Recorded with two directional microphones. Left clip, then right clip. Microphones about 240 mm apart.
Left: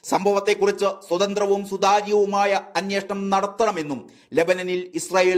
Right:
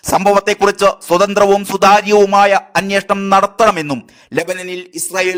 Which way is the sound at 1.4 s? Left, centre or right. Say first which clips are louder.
Right 10 dB; right.